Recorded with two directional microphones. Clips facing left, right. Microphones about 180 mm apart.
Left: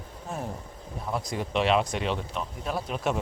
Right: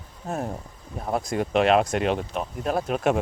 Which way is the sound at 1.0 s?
50° right (ahead or behind).